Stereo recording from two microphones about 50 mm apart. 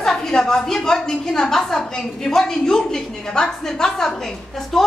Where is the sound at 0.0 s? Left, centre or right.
Centre.